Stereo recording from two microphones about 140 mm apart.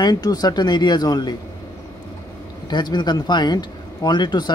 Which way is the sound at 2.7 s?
30° left (ahead or behind).